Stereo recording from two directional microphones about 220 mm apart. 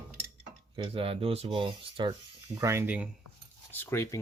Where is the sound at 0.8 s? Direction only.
25° right (ahead or behind).